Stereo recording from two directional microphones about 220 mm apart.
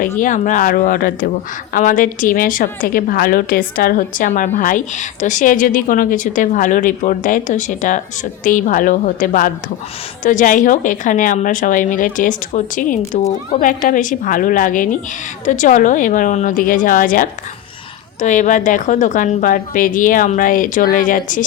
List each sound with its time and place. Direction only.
0.2 s a woman's voice: 35° left (ahead or behind)